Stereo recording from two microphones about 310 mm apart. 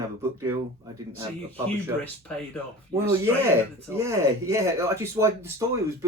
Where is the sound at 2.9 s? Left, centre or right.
Centre.